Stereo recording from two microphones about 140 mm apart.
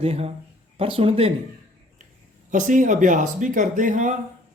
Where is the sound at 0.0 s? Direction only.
45° right (ahead or behind).